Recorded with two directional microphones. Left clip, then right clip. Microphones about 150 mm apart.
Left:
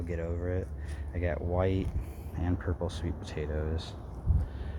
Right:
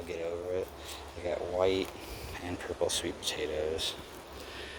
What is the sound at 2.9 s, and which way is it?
Speech, 30° right (ahead or behind).